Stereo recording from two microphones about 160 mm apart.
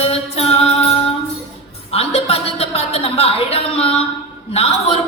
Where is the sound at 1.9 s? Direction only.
40° left (ahead or behind).